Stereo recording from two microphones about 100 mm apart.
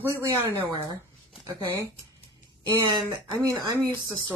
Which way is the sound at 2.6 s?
50° right (ahead or behind).